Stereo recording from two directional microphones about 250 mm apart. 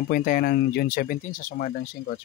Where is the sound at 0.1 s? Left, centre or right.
Left.